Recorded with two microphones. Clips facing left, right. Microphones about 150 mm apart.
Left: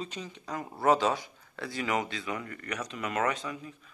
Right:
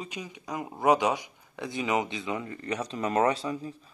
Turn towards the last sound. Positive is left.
turn(degrees=-30)  # may be behind; listen again after turning